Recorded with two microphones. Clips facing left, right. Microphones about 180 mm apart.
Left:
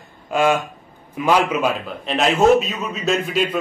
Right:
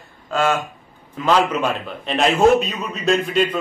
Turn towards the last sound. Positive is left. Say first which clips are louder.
# right 2 dB
turn(degrees=5)  # may be behind; listen again after turning